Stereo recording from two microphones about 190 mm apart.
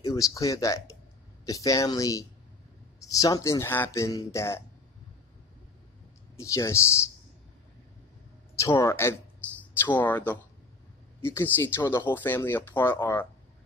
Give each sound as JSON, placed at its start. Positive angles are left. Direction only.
{"t": 0.0, "sound": "speech", "side_deg": 15}
{"t": 6.3, "sound": "speech", "side_deg": 15}
{"t": 8.5, "sound": "speech", "side_deg": 15}